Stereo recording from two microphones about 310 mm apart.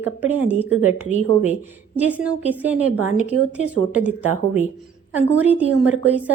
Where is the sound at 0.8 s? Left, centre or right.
Left.